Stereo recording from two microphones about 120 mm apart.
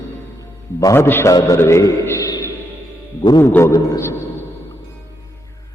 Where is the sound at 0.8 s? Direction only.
30° left (ahead or behind).